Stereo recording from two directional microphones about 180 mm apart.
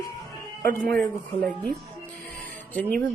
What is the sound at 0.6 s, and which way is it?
Speech, 60° right (ahead or behind).